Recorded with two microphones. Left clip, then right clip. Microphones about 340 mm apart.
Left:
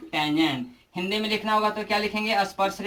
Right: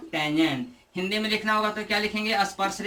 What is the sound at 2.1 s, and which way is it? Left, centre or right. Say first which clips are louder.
Speech: left 1 dB; centre.